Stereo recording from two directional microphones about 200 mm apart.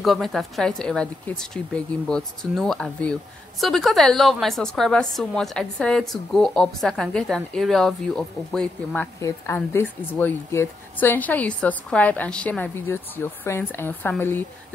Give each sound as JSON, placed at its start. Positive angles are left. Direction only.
{"t": 0.0, "sound": "a woman's voice", "side_deg": 0}